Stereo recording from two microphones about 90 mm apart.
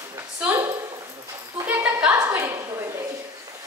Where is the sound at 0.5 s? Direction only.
30° right (ahead or behind).